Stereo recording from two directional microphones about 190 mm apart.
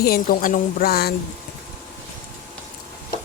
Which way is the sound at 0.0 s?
50° left (ahead or behind).